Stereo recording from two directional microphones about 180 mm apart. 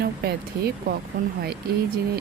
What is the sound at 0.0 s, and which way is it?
Speech, 60° right (ahead or behind).